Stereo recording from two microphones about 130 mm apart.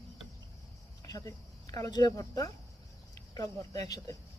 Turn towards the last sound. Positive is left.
turn(degrees=25)  # may be behind; listen again after turning